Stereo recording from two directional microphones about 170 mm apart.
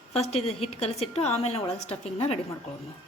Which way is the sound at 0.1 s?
35° left (ahead or behind).